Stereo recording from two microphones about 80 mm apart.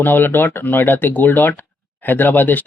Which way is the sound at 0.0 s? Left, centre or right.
Left.